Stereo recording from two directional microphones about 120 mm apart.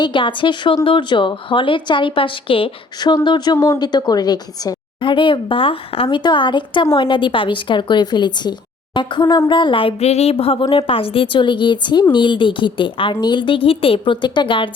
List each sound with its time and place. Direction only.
0.0 s a woman's voice: 45° left (ahead or behind)